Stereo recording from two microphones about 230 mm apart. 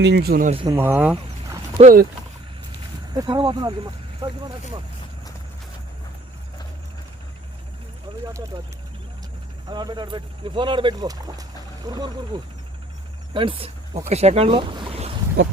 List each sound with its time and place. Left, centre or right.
0.0 s speech: right
0.5 s speech: right
0.8 s speech: centre
1.1 s vehicle: centre
1.8 s speech: right
3.1 s speech: centre
9.6 s speech: centre